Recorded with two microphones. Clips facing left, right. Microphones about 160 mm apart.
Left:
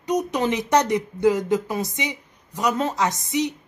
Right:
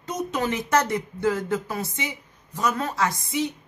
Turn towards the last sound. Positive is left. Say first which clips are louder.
# left 2 dB
turn(degrees=20)  # may be behind; listen again after turning